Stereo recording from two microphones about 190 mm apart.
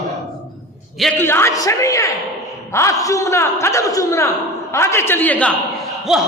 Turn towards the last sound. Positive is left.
turn(degrees=0)  # may be behind; listen again after turning